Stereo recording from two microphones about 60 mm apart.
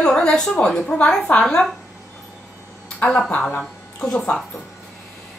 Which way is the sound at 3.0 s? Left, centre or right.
Centre.